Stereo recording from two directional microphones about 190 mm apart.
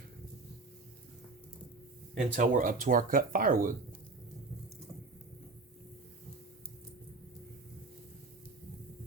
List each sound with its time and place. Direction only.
2.1 s speech: 40° right (ahead or behind)